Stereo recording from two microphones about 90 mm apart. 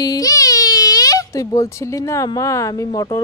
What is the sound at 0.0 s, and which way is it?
Speech, 45° left (ahead or behind).